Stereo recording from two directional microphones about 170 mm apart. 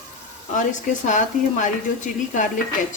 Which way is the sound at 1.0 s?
45° left (ahead or behind).